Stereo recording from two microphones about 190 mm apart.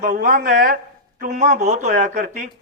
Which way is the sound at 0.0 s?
45° right (ahead or behind).